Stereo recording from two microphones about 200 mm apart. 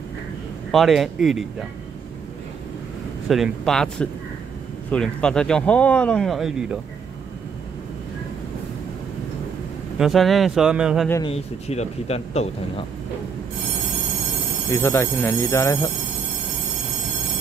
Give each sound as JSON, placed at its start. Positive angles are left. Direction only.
{"t": 0.7, "sound": "speech", "side_deg": 0}
{"t": 3.3, "sound": "speech", "side_deg": 0}
{"t": 9.9, "sound": "speech", "side_deg": 0}
{"t": 11.2, "sound": "speech", "side_deg": 30}
{"t": 14.7, "sound": "speech", "side_deg": 15}